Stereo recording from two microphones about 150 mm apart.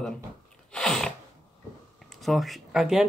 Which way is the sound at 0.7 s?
5° left (ahead or behind).